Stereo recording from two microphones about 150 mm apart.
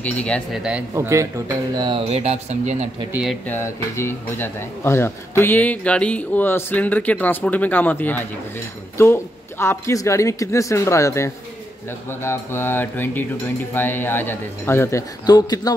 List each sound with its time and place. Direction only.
0.0 s speech: 10° left (ahead or behind)
0.5 s speech: 5° right (ahead or behind)
0.9 s speech: 20° right (ahead or behind)
1.8 s speech: 35° right (ahead or behind); by 2.9 s 50° right (ahead or behind)
3.1 s speech: 5° right (ahead or behind)
3.4 s speech: 15° left (ahead or behind)